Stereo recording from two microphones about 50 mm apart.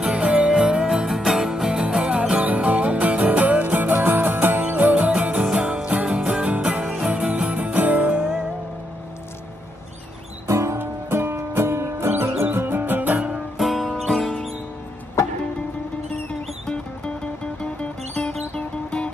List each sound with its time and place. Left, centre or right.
0.0 s music: right
8.2 s music: centre
10.4 s music: right
10.8 s music: right
12.1 s music: right
13.3 s music: centre
16.3 s music: centre
18.5 s music: left